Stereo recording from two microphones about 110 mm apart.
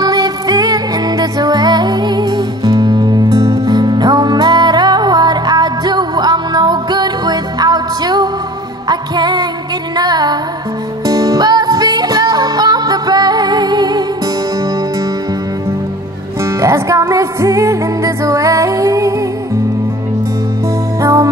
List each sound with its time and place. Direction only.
0.0 s music: 35° right (ahead or behind)
16.4 s music: 25° right (ahead or behind)
21.0 s music: 25° right (ahead or behind)